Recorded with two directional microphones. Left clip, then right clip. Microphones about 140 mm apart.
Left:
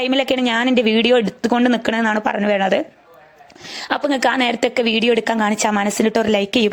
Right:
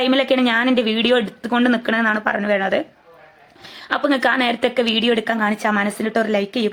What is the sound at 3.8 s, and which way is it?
A woman's voice, 55° left (ahead or behind).